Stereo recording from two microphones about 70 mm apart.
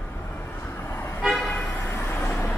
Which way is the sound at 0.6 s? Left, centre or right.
Left.